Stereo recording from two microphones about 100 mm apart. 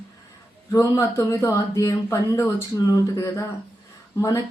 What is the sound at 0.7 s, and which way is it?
Speech, 30° left (ahead or behind).